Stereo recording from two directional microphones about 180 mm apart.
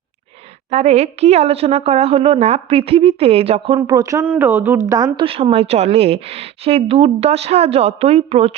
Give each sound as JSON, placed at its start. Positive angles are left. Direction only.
{"t": 0.7, "sound": "a woman's voice", "side_deg": -35}
{"t": 3.8, "sound": "a woman's voice", "side_deg": -20}